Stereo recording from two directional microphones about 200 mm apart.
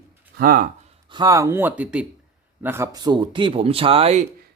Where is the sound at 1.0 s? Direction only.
20° right (ahead or behind).